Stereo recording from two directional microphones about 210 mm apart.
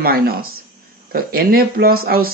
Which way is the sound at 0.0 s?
45° right (ahead or behind).